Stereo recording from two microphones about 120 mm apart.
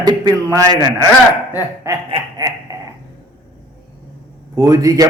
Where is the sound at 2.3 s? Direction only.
30° right (ahead or behind).